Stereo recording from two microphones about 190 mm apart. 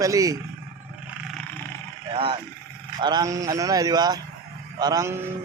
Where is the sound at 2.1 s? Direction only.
30° right (ahead or behind).